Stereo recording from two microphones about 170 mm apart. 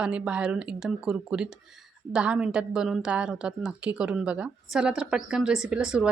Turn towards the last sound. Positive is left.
turn(degrees=-5)  # may be behind; listen again after turning